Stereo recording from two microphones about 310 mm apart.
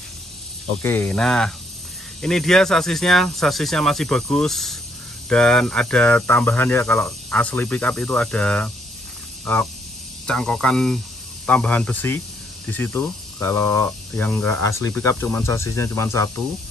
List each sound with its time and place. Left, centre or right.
0.8 s speech: centre